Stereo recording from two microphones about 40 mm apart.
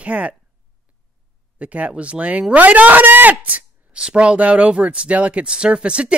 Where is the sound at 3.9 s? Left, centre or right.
Right.